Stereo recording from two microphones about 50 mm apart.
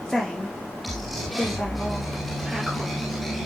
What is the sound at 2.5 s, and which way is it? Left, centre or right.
Music, centre.